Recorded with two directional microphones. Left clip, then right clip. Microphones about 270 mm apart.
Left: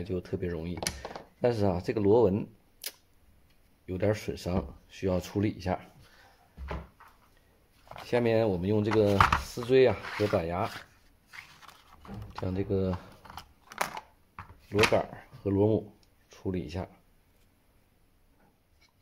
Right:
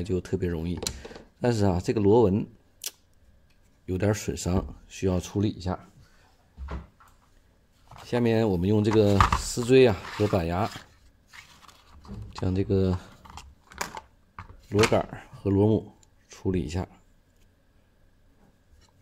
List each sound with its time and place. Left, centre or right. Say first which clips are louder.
0.0 s speech: right 5 dB; right; by 5.8 s centre
8.0 s speech: right 1 dB; centre
12.4 s speech: right 4 dB; right
13.9 s computer keyboard: right 1 dB; centre
14.9 s speech: right 2 dB; right